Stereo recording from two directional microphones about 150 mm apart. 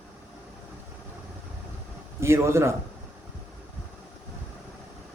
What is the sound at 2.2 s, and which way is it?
Speech, 20° right (ahead or behind).